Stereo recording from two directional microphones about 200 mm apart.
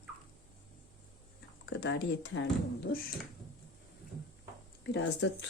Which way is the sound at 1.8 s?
60° left (ahead or behind).